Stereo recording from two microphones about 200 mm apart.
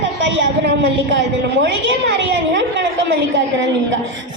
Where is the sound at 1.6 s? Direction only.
60° right (ahead or behind).